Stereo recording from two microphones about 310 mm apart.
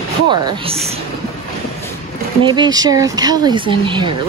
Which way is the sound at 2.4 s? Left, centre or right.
Centre.